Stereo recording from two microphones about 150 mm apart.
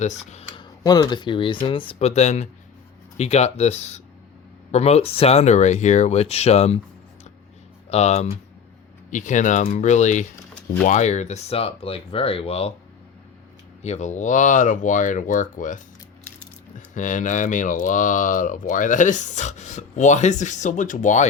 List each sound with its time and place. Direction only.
0.0 s speech: 50° left (ahead or behind)
0.6 s speech: 30° left (ahead or behind); by 6.7 s 45° left (ahead or behind)
7.9 s speech: 45° left (ahead or behind)
13.8 s speech: 50° left (ahead or behind)